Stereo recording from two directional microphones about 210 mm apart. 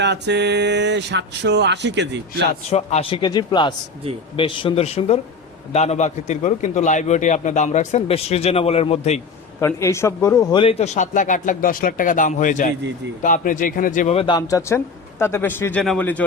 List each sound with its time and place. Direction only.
0.0 s speech: 55° right (ahead or behind)
2.6 s a man's voice: 30° left (ahead or behind)
9.6 s a man's voice: 15° left (ahead or behind)